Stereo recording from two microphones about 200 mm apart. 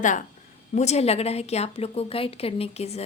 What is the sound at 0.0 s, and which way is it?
Speech, 40° left (ahead or behind).